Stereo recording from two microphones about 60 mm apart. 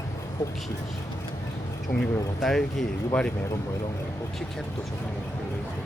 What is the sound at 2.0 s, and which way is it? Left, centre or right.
Speech, centre.